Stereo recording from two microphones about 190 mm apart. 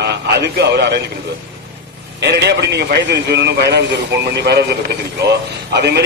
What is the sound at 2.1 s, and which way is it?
Speech, 60° right (ahead or behind).